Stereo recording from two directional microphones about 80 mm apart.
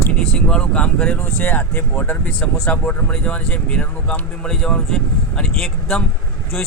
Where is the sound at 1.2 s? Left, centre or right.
Left.